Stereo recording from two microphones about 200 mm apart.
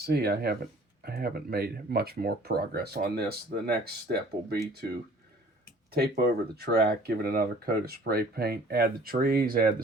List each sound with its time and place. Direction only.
0.0 s speech: 55° right (ahead or behind)
5.9 s speech: 50° right (ahead or behind)